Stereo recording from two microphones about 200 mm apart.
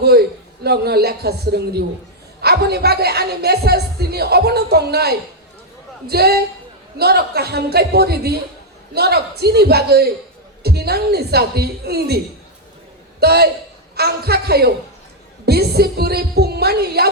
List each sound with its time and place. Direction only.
0.0 s a woman's voice: 50° right (ahead or behind)